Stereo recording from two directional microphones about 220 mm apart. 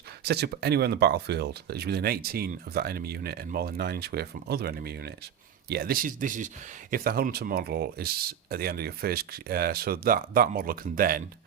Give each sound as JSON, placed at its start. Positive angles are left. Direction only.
{"t": 0.3, "sound": "speech", "side_deg": -50}